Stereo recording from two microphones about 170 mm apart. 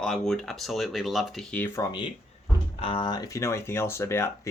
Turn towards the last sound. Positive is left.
turn(degrees=15)  # may be behind; listen again after turning